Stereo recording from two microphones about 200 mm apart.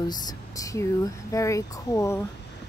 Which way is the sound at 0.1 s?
20° left (ahead or behind).